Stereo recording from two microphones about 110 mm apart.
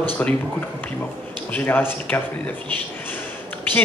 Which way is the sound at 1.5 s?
20° left (ahead or behind).